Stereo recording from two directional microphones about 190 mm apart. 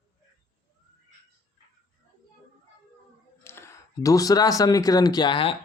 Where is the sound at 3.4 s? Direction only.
15° left (ahead or behind).